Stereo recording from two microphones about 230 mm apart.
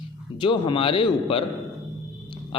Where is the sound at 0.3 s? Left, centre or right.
Left.